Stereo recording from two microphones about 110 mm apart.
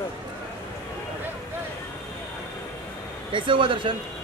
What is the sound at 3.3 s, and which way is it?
Speech, 50° right (ahead or behind).